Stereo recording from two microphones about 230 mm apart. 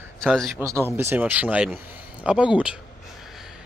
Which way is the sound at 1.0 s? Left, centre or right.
Centre.